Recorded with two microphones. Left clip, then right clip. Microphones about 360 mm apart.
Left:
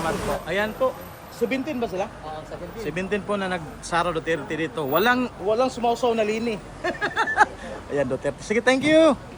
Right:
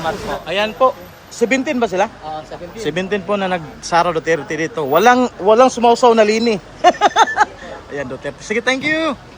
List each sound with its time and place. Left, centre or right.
0.4 s speech: centre
1.4 s speech: centre